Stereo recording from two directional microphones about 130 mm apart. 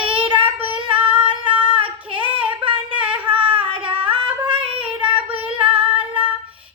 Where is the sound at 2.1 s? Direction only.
40° right (ahead or behind).